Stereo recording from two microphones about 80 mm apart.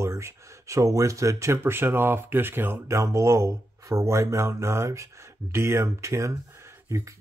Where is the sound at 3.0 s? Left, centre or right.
Right.